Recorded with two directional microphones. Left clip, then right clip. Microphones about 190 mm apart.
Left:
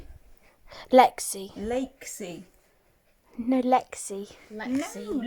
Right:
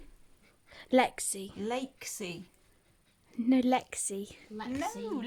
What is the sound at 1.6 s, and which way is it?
Speech, 35° right (ahead or behind).